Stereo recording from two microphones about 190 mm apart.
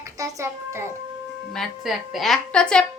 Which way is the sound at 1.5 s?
Centre (ahead or behind).